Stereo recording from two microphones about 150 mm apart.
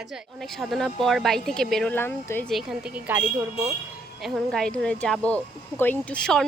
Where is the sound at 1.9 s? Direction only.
15° left (ahead or behind).